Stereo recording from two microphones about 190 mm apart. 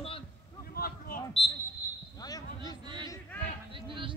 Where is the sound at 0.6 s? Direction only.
50° left (ahead or behind).